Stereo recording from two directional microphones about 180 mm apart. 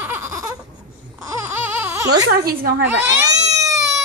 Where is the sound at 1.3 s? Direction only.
10° right (ahead or behind).